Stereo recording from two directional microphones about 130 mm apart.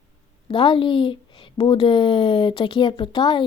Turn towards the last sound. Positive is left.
turn(degrees=40)  # may be behind; listen again after turning